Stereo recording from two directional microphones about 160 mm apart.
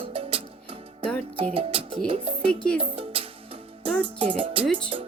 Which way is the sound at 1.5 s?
35° right (ahead or behind).